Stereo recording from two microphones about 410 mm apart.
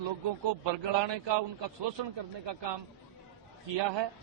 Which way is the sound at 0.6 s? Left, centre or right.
Right.